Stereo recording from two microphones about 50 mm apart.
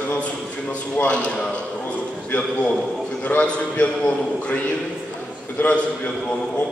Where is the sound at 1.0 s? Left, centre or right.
Left.